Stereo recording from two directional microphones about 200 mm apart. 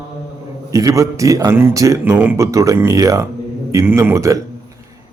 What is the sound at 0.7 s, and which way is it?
Speech, 15° right (ahead or behind).